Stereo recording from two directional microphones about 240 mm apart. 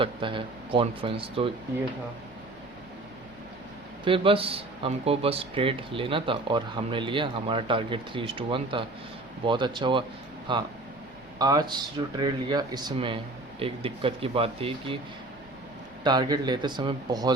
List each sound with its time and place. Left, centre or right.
0.0 s speech: right
4.0 s speech: right
16.0 s speech: centre